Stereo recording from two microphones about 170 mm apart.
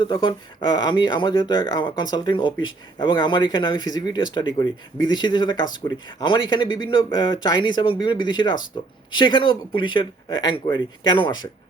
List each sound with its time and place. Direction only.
0.0 s speech: 30° left (ahead or behind)